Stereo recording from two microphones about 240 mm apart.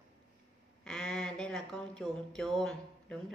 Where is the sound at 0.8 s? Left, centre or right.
Centre.